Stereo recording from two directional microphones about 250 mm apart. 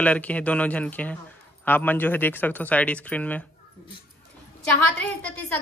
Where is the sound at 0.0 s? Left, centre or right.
Centre.